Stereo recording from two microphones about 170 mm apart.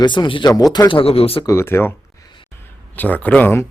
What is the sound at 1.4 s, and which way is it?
Speech, 15° left (ahead or behind).